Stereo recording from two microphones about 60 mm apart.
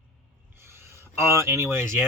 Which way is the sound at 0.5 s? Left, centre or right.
Right.